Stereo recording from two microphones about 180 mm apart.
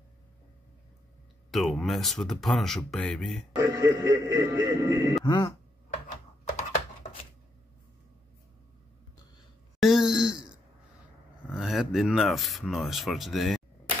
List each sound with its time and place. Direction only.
1.5 s speech: centre (ahead or behind)
3.5 s speech: 15° right (ahead or behind)
5.2 s speech: 25° left (ahead or behind)
9.8 s wail: centre (ahead or behind)
11.5 s speech: centre (ahead or behind)